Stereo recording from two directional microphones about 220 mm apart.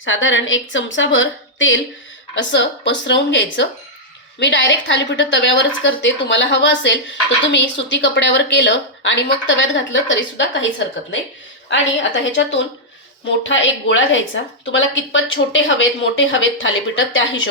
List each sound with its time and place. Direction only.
0.0 s a woman's voice: 60° left (ahead or behind)
11.7 s a woman's voice: 55° left (ahead or behind)